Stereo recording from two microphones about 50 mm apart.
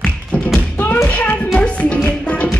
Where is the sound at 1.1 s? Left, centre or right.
Left.